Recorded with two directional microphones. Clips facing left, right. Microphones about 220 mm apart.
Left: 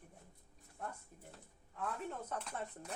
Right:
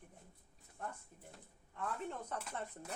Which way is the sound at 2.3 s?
5° right (ahead or behind).